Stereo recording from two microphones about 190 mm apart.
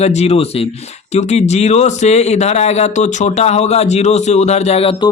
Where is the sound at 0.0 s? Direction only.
35° left (ahead or behind).